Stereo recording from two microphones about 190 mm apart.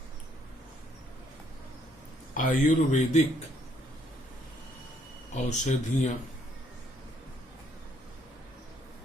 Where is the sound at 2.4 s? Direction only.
40° left (ahead or behind).